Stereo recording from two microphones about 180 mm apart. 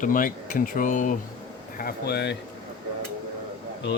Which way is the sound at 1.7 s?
60° left (ahead or behind).